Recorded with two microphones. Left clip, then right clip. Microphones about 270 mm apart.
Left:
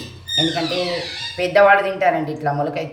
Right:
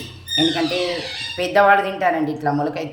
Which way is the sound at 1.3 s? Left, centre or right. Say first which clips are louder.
Left 1 dB; centre.